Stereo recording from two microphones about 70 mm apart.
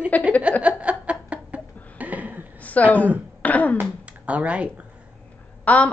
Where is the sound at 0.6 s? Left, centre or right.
Centre.